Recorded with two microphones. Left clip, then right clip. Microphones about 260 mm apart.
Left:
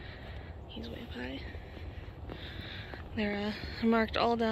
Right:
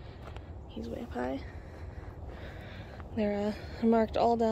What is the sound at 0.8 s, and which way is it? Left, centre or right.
Speech, centre.